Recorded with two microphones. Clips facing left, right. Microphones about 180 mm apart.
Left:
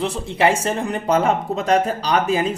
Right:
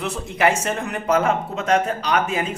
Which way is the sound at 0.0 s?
30° left (ahead or behind).